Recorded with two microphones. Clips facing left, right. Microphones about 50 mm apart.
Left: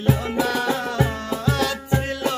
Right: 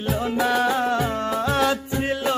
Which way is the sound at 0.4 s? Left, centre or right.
Centre.